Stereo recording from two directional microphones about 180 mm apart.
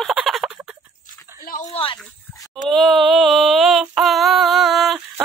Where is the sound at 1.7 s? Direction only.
30° left (ahead or behind).